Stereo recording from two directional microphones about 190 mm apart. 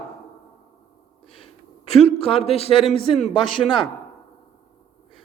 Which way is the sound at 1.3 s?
30° left (ahead or behind).